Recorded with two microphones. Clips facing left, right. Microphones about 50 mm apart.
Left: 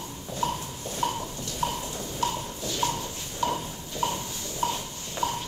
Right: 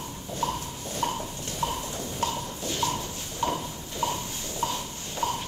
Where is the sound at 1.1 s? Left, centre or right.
Right.